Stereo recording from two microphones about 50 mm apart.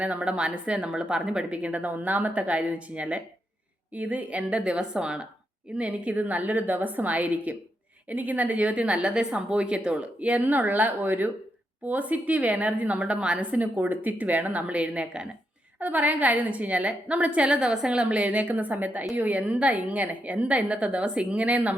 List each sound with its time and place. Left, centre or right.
0.0 s a woman's voice: right
15.8 s a woman's voice: right